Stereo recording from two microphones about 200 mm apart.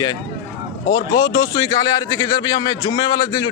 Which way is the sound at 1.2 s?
20° left (ahead or behind).